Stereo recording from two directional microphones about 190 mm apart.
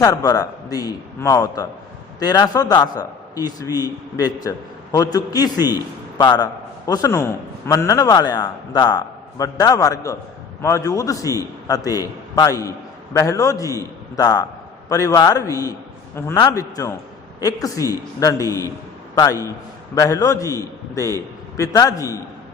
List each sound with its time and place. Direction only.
0.0 s a man's voice: 20° left (ahead or behind)